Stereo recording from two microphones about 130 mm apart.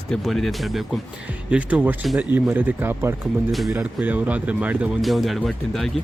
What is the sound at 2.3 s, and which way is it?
Speech, 15° right (ahead or behind).